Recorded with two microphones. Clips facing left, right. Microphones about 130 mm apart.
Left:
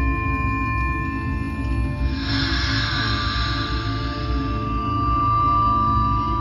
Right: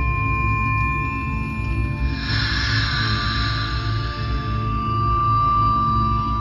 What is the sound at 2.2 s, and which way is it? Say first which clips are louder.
Music: left 3 dB; 10° left (ahead or behind).